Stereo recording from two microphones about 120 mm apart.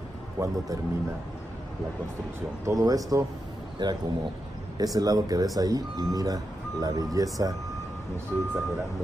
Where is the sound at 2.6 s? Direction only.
25° right (ahead or behind).